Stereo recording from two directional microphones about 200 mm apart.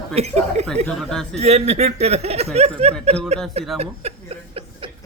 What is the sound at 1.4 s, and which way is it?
Speech, 35° right (ahead or behind).